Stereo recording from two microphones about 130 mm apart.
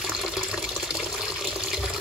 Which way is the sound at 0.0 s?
5° right (ahead or behind).